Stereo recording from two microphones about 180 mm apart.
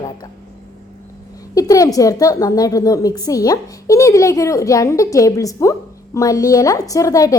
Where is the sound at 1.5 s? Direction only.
20° left (ahead or behind).